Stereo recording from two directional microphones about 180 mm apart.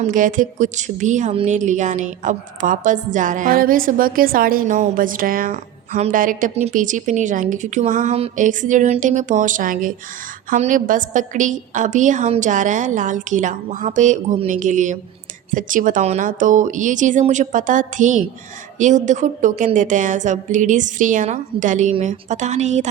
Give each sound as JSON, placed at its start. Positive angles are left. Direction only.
{"t": 0.0, "sound": "a woman's voice", "side_deg": -45}